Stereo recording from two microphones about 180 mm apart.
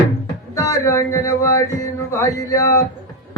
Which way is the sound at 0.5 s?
15° left (ahead or behind).